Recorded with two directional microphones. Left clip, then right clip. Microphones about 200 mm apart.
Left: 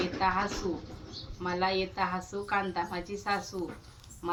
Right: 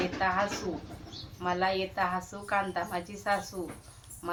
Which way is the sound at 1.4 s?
10° right (ahead or behind).